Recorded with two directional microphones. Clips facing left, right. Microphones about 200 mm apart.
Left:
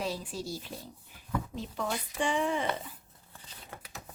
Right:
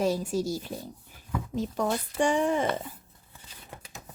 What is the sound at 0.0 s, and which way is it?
Speech, 45° right (ahead or behind).